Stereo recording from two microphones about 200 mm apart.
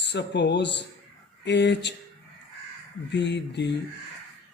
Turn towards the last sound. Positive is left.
turn(degrees=60)  # may be behind; listen again after turning